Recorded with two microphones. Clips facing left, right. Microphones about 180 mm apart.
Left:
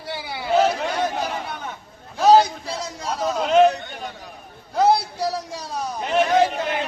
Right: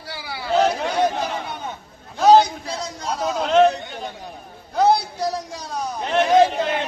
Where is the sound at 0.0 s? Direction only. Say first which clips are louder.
Left 2 dB; 25° left (ahead or behind).